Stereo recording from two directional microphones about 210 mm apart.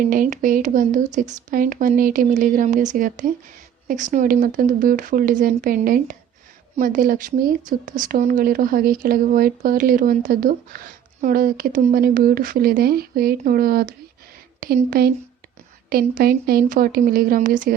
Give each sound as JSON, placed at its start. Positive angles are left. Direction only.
{"t": 0.0, "sound": "speech", "side_deg": -40}